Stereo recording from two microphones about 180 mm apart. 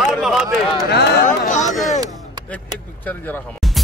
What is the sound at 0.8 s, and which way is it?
Speech, 65° left (ahead or behind).